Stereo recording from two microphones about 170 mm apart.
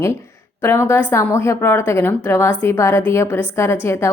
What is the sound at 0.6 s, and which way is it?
A woman's voice, 15° left (ahead or behind).